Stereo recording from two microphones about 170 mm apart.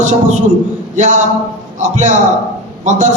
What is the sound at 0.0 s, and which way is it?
A man's voice, 45° right (ahead or behind).